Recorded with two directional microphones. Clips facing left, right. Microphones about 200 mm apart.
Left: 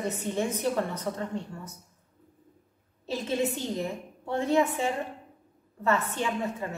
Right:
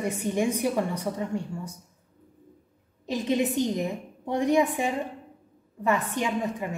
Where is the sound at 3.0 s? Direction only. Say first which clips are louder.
Right 3 dB; 15° right (ahead or behind).